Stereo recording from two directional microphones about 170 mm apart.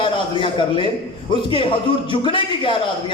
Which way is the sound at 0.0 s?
30° left (ahead or behind).